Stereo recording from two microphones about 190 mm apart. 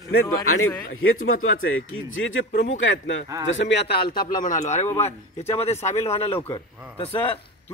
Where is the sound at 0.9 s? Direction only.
90° left; by 7.4 s 30° left (ahead or behind).